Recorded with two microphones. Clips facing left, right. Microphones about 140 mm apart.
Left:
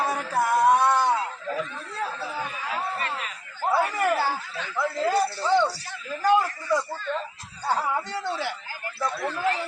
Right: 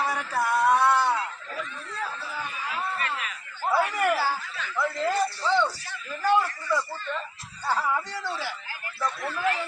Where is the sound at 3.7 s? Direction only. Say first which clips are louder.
Left 1 dB; 25° left (ahead or behind).